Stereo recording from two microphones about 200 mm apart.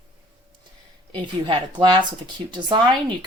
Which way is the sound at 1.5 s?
25° right (ahead or behind).